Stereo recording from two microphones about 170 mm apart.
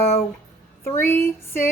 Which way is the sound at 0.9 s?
15° left (ahead or behind).